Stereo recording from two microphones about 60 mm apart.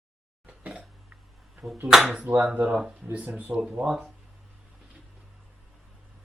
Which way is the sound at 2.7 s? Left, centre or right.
Centre.